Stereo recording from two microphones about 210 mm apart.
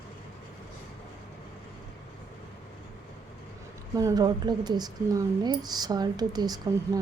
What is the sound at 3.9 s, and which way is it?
Speech, 20° right (ahead or behind).